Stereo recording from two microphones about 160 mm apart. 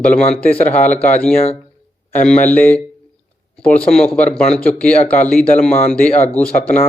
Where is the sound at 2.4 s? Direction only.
10° left (ahead or behind).